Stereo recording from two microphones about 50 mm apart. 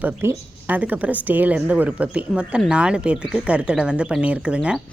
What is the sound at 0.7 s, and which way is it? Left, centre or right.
A woman's voice, right.